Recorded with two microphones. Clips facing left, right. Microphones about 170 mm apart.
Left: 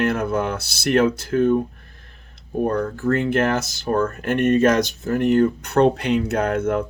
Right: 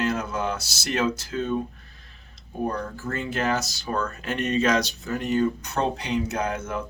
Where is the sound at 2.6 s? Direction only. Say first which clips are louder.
Left 7 dB; 60° left (ahead or behind).